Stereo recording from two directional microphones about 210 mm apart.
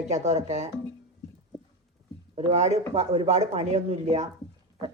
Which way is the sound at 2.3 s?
30° right (ahead or behind).